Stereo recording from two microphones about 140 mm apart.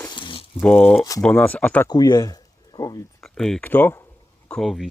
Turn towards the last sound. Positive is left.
turn(degrees=0)  # may be behind; listen again after turning